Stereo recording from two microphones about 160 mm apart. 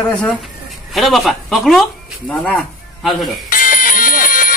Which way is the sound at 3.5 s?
60° left (ahead or behind).